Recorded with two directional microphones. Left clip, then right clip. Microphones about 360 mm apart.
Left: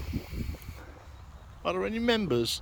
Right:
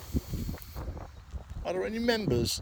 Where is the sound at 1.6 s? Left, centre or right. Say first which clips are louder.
Left 2 dB; centre.